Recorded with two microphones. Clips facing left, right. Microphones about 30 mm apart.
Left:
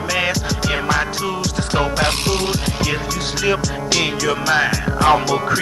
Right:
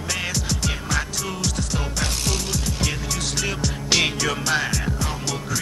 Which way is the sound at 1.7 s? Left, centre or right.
Left.